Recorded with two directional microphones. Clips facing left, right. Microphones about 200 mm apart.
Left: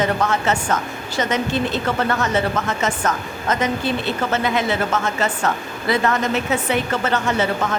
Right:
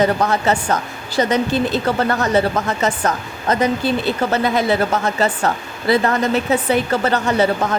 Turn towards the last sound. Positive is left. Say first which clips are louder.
# right 4 dB
turn(degrees=-35)  # may be behind; listen again after turning